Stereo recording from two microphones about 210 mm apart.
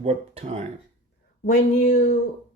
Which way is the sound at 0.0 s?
30° right (ahead or behind).